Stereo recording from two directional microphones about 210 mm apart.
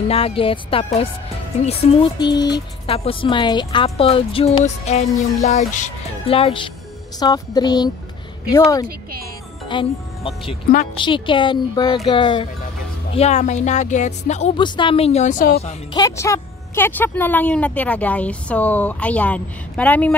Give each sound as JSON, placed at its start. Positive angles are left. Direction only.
{"t": 0.1, "sound": "speech", "side_deg": 25}
{"t": 9.7, "sound": "speech", "side_deg": 25}
{"t": 14.6, "sound": "speech", "side_deg": 25}
{"t": 15.9, "sound": "a woman's voice", "side_deg": 15}